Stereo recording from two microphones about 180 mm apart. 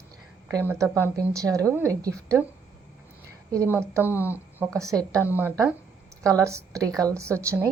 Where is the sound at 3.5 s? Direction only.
15° right (ahead or behind).